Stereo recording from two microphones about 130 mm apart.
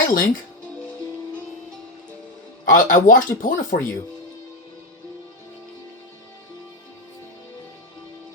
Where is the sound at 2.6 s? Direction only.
90° left.